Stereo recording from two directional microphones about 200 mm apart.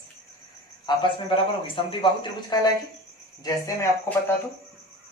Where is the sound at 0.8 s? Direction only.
25° left (ahead or behind).